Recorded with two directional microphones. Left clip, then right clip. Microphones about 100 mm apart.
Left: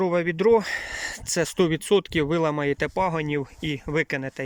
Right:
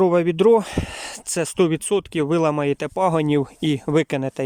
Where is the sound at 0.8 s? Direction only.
15° right (ahead or behind).